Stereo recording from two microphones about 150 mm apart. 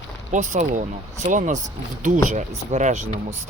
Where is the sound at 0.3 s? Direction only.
55° right (ahead or behind).